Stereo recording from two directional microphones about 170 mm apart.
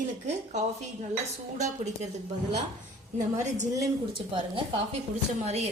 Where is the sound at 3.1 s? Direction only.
45° right (ahead or behind).